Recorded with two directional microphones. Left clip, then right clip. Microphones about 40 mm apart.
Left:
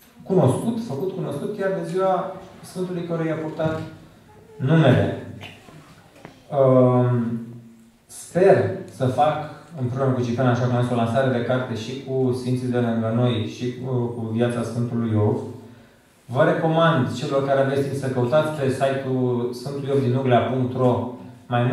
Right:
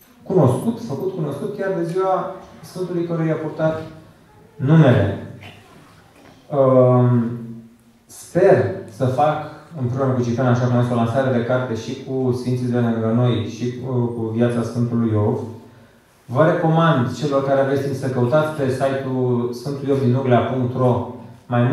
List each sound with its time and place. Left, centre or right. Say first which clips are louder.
0.3 s a man's voice: right 3 dB; centre
3.1 s a man's voice: right 3 dB; centre
6.5 s speech: right 3 dB; centre
8.3 s a man's voice: right 2 dB; centre
12.7 s speech: right 3 dB; centre
13.4 s a man's voice: right 2 dB; right
15.0 s speech: right 2 dB; centre
16.3 s a man's voice: right 2 dB; centre